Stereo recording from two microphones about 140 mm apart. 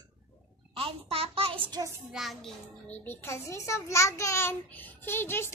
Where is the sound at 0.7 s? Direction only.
45° right (ahead or behind).